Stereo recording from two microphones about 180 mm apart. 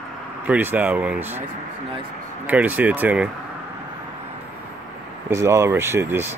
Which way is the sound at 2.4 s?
10° right (ahead or behind).